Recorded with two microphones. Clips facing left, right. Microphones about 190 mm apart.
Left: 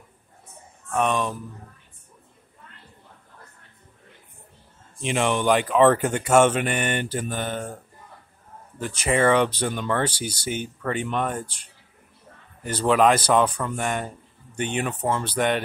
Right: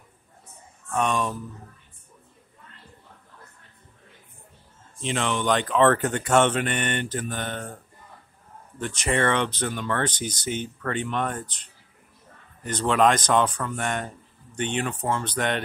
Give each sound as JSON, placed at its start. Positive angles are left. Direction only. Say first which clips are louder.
{"t": 0.9, "sound": "speech", "louder": "left 2 dB", "side_deg": 0}
{"t": 5.0, "sound": "speech", "louder": "left 3 dB", "side_deg": 15}